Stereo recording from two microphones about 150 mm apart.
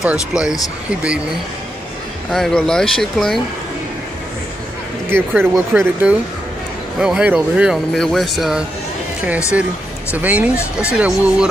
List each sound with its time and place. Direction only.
0.0 s speech: 5° right (ahead or behind)
2.3 s speech: centre (ahead or behind)
5.1 s speech: 15° right (ahead or behind)
10.1 s speech: 10° right (ahead or behind)